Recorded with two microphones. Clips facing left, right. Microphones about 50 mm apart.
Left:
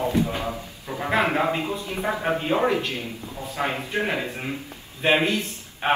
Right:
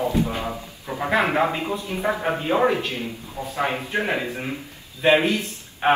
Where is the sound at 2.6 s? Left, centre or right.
Right.